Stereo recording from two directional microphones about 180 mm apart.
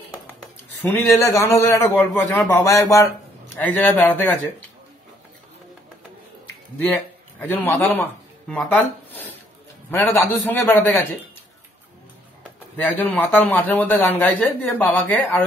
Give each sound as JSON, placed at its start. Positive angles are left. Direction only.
{"t": 0.8, "sound": "a man's voice", "side_deg": 10}
{"t": 6.9, "sound": "speech", "side_deg": 10}
{"t": 9.8, "sound": "a man's voice", "side_deg": 10}
{"t": 12.7, "sound": "a man's voice", "side_deg": 10}